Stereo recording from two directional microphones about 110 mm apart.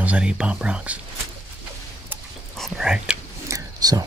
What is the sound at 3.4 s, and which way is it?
Whispering, 35° right (ahead or behind).